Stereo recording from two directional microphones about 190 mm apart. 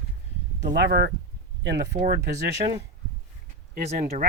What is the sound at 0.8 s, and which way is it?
Speech, 60° right (ahead or behind).